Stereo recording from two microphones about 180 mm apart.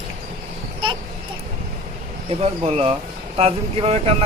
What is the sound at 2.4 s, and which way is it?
A man's voice, 35° right (ahead or behind).